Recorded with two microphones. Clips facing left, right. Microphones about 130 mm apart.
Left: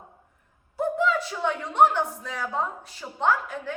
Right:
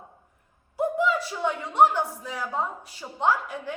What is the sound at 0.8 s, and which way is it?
A woman's voice, 10° right (ahead or behind).